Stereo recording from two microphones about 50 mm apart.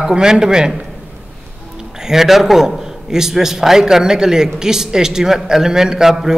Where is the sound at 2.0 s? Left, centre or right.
Centre.